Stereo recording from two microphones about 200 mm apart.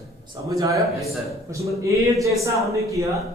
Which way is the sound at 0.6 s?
15° right (ahead or behind).